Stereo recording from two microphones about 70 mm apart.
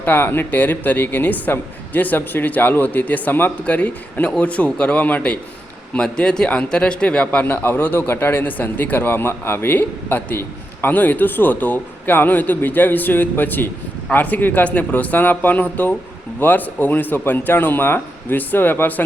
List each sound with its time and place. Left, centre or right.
0.0 s a man's voice: left